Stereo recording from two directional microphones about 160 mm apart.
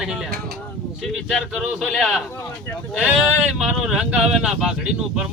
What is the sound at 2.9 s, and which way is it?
Speech, 5° right (ahead or behind).